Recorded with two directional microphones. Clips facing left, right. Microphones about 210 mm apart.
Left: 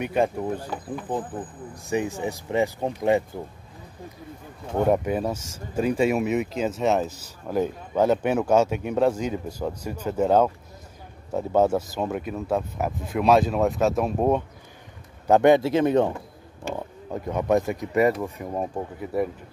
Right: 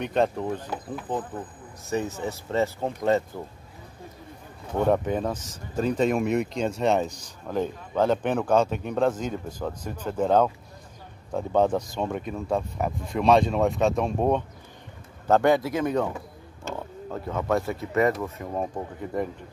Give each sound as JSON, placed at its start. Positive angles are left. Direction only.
{"t": 0.0, "sound": "speech", "side_deg": 10}
{"t": 4.7, "sound": "speech", "side_deg": 10}
{"t": 15.2, "sound": "speech", "side_deg": 15}
{"t": 16.6, "sound": "speech", "side_deg": 15}